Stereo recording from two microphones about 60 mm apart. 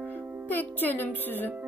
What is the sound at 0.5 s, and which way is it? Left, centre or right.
Music, left.